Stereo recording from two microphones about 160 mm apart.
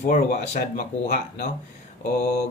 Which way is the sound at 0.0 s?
50° left (ahead or behind).